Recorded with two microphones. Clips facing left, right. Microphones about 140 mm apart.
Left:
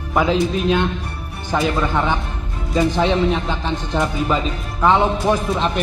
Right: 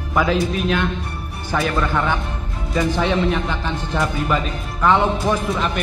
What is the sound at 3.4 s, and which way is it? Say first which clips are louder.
Speech: left 1 dB; 20° left (ahead or behind).